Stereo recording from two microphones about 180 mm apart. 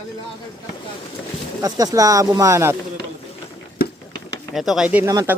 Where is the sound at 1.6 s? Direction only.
20° right (ahead or behind).